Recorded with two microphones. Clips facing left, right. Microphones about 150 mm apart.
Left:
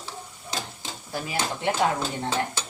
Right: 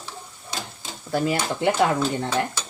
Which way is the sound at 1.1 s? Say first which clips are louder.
Right 10 dB; 70° right (ahead or behind).